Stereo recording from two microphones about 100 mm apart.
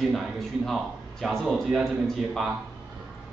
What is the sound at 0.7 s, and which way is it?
A man's voice, centre (ahead or behind).